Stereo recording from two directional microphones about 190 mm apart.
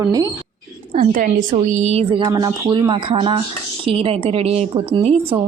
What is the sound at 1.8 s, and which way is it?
A woman's voice, 30° right (ahead or behind).